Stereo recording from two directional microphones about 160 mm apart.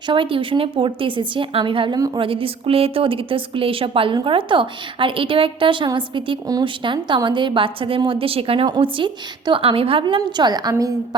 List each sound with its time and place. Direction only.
0.1 s a woman's voice: 30° right (ahead or behind)